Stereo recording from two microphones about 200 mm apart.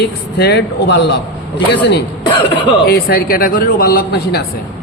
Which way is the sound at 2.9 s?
50° left (ahead or behind).